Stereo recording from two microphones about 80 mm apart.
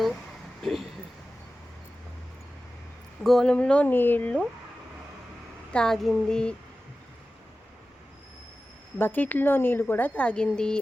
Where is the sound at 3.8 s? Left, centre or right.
Left.